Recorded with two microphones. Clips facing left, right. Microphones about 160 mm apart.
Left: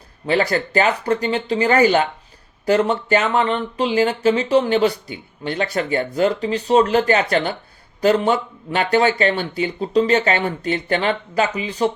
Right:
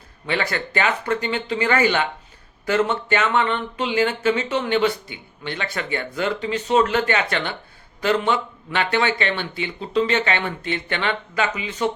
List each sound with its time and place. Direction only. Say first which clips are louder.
0.3 s speech: left 6 dB; 40° left (ahead or behind)